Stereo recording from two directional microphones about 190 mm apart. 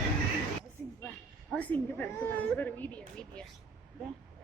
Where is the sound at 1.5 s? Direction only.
10° left (ahead or behind).